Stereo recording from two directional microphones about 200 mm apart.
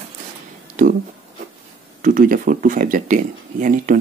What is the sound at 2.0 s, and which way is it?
Speech, 40° right (ahead or behind).